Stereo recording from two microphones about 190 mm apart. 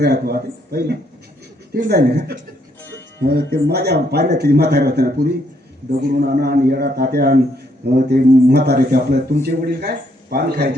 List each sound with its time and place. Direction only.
0.0 s speech: 55° right (ahead or behind)